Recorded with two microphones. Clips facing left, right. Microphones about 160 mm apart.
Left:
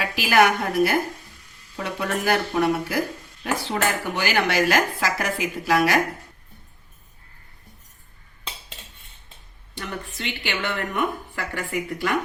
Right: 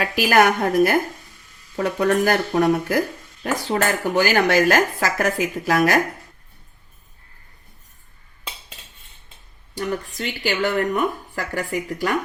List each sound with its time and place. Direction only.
0.0 s speech: 45° right (ahead or behind)
9.7 s speech: 40° right (ahead or behind)